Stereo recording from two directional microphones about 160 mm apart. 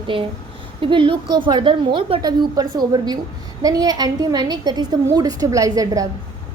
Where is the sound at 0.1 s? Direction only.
30° right (ahead or behind).